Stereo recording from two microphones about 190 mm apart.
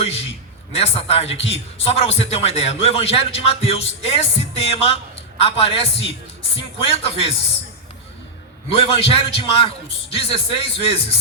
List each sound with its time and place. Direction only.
0.7 s a man's voice: 30° left (ahead or behind)
8.7 s a man's voice: 30° left (ahead or behind)